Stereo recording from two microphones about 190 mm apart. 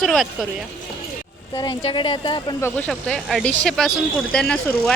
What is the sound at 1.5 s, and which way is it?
Speech, 20° left (ahead or behind).